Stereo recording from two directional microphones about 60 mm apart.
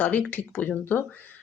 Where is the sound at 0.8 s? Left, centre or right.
Left.